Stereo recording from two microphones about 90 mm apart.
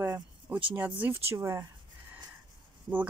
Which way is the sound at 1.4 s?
35° right (ahead or behind).